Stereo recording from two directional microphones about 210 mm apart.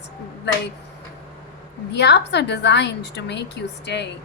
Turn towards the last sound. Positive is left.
turn(degrees=55)  # may be behind; listen again after turning